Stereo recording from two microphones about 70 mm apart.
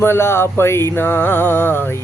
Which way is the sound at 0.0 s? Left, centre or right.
Left.